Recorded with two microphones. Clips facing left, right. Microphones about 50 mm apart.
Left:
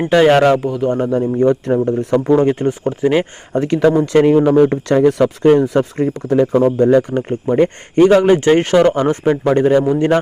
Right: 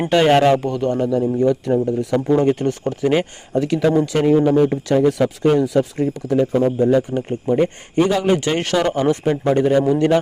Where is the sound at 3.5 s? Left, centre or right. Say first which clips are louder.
Left 2 dB; left.